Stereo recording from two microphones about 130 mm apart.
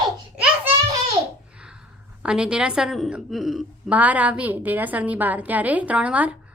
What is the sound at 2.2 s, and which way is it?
A woman's voice, 5° right (ahead or behind).